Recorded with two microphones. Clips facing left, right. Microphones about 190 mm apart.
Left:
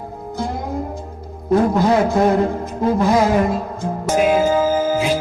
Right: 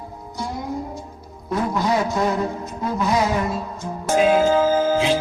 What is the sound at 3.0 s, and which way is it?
Music, 50° left (ahead or behind).